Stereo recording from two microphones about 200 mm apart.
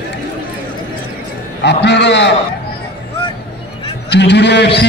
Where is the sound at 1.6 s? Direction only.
60° left (ahead or behind).